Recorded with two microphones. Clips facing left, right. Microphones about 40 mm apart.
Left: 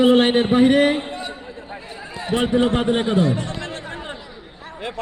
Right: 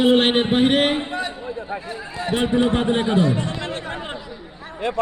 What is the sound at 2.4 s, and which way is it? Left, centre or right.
Speech, left.